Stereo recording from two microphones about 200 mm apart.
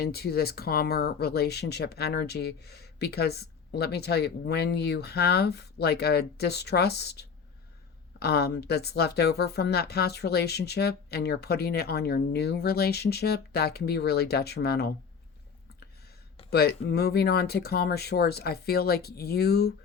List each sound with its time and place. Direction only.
0.0 s speech: 50° left (ahead or behind)
16.5 s speech: 50° left (ahead or behind)